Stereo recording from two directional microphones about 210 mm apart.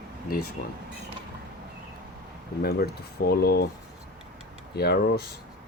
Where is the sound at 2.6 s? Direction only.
50° left (ahead or behind).